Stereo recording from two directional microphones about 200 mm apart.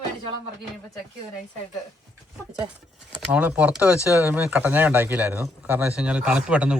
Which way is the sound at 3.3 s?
5° right (ahead or behind).